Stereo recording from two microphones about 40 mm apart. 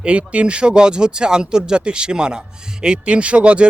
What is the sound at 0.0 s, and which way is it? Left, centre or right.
Speech, right.